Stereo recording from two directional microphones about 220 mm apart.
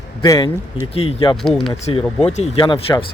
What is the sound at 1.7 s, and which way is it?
Speech, 30° left (ahead or behind).